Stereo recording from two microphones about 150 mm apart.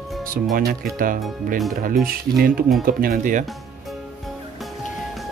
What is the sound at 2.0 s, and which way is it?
Speech, 80° right.